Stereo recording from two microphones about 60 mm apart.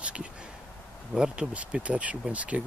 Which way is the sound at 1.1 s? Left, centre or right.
Centre.